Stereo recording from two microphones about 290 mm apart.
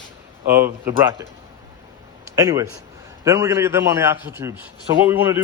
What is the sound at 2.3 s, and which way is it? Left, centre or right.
A man's voice, centre.